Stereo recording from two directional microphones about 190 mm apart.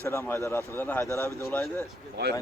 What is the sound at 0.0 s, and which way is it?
Speech, 15° left (ahead or behind).